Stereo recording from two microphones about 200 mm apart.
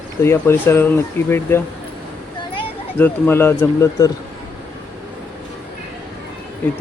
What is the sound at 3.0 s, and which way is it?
Speech, 10° left (ahead or behind).